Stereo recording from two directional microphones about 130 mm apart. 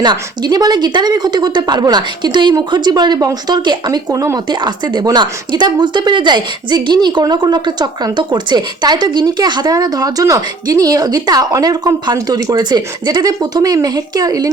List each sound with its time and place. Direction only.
0.0 s speech: 35° right (ahead or behind)